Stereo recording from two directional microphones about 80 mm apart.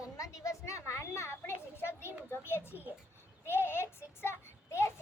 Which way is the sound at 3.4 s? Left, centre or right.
Left.